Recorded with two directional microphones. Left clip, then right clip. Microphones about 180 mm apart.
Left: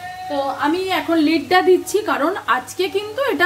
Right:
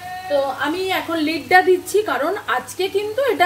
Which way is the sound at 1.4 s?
40° left (ahead or behind).